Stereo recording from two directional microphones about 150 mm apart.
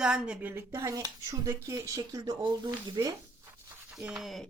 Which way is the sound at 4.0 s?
Centre (ahead or behind).